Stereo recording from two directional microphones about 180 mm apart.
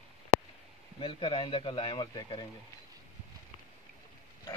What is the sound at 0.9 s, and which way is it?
Speech, 30° left (ahead or behind).